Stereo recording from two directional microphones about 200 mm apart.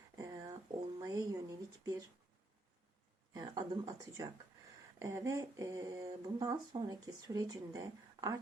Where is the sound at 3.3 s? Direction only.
20° right (ahead or behind).